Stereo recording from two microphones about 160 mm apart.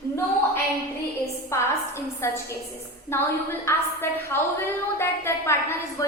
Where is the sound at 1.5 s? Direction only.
15° left (ahead or behind).